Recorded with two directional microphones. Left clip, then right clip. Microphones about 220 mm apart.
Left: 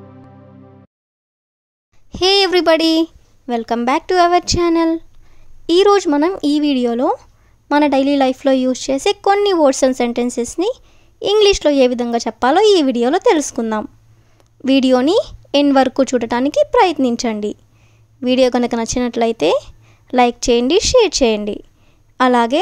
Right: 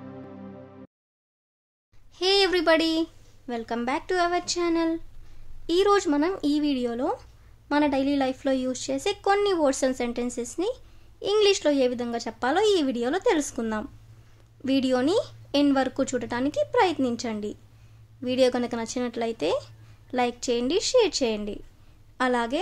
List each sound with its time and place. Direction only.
2.1 s a woman's voice: 35° left (ahead or behind)